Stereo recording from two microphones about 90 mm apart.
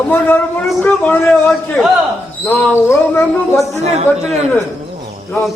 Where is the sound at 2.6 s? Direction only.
25° left (ahead or behind).